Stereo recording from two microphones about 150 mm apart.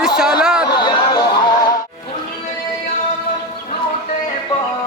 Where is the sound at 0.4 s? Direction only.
5° right (ahead or behind).